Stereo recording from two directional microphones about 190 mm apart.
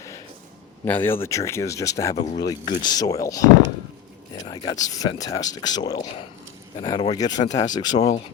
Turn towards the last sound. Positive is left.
turn(degrees=20)  # may be behind; listen again after turning